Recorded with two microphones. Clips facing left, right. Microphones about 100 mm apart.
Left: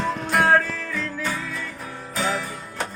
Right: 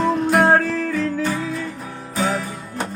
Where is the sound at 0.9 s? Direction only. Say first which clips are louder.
Right 7 dB; 20° right (ahead or behind).